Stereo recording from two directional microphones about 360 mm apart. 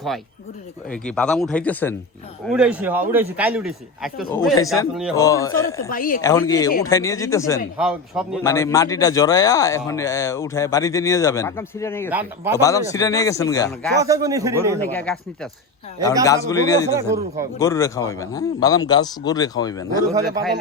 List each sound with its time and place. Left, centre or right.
0.9 s a man's voice: centre
5.9 s speech: left
6.2 s speech: centre
7.8 s a man's voice: centre
8.4 s speech: centre
14.0 s speech: centre
14.9 s a man's voice: centre
16.2 s speech: centre
16.9 s speech: centre
17.6 s speech: centre
20.1 s speech: centre